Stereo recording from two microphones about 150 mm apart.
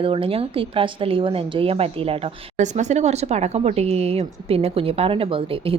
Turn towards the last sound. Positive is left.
turn(degrees=-40)  # may be behind; listen again after turning